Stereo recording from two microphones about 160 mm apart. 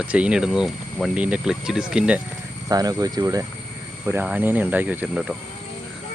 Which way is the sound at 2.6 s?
25° right (ahead or behind).